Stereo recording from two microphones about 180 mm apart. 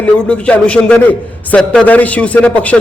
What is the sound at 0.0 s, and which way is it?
A man's voice, 5° left (ahead or behind).